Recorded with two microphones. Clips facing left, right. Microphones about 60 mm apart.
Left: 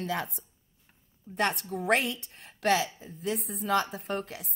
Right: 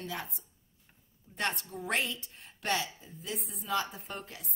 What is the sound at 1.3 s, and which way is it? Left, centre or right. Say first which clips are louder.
A woman's voice: left 6 dB; left.